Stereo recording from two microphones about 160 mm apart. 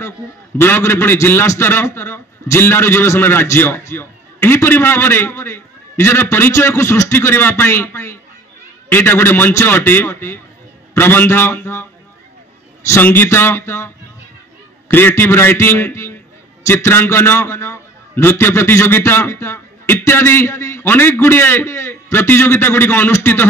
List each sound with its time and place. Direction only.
0.6 s a man's voice: 15° left (ahead or behind)